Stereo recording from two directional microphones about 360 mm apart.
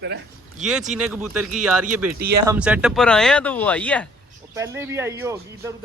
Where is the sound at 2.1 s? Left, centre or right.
Right.